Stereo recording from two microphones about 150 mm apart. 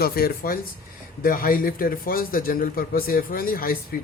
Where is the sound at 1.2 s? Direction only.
70° left (ahead or behind).